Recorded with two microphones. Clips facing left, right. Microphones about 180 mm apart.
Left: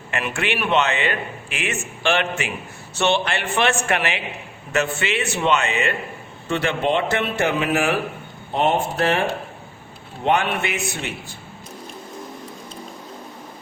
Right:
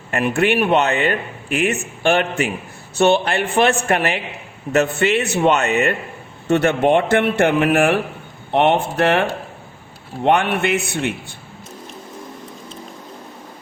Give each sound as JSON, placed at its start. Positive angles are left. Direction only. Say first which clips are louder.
{"t": 0.1, "sound": "a man's voice", "louder": "right 7 dB", "side_deg": -40}
{"t": 0.8, "sound": "a man's voice", "louder": "right 3 dB", "side_deg": -40}
{"t": 10.2, "sound": "a man's voice", "louder": "right 4 dB", "side_deg": -60}